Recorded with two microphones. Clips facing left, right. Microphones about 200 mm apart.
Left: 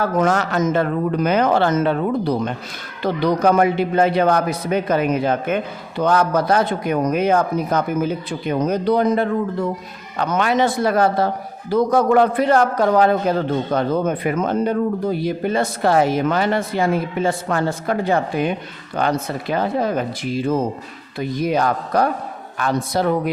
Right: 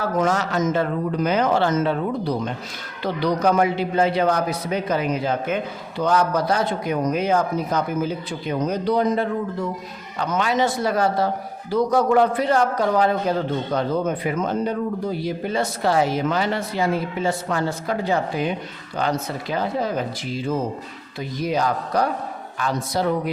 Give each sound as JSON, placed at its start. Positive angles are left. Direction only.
{"t": 0.0, "sound": "speech", "side_deg": 60}